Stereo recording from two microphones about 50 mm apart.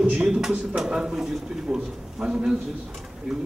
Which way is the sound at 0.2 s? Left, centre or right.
Centre.